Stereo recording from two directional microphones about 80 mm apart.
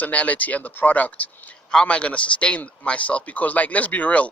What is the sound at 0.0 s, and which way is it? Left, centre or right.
A man's voice, centre.